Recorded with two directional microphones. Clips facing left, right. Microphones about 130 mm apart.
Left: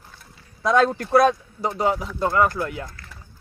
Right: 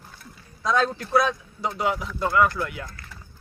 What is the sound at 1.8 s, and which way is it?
A man's voice, 35° left (ahead or behind).